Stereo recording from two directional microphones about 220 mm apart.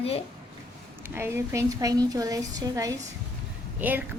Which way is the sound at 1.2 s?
10° right (ahead or behind).